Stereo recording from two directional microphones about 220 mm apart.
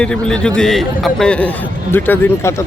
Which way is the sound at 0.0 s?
5° left (ahead or behind).